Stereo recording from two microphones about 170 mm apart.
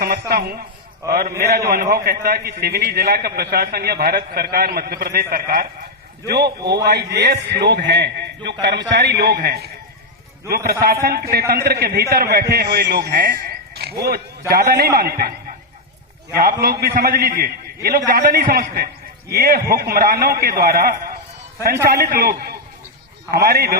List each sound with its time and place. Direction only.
0.0 s a man's voice: 65° right (ahead or behind)
7.9 s a man's voice: 90° right
9.0 s a man's voice: 70° right (ahead or behind)